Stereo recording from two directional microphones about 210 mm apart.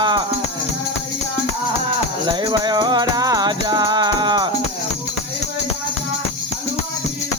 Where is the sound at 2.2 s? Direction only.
20° right (ahead or behind).